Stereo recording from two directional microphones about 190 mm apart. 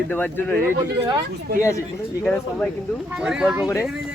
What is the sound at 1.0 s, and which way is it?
Speech, 25° right (ahead or behind).